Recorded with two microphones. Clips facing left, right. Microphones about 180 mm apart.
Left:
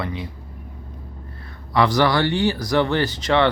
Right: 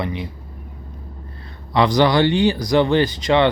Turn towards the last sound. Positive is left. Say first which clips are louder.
# right 3 dB
turn(degrees=-15)  # may be behind; listen again after turning